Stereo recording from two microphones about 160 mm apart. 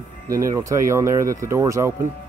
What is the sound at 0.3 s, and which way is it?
Speech, 20° right (ahead or behind).